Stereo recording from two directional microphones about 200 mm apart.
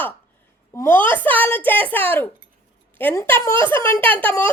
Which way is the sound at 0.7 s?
15° left (ahead or behind).